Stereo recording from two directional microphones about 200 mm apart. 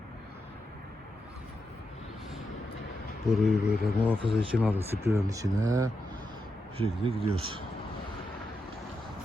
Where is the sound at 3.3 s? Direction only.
Centre (ahead or behind).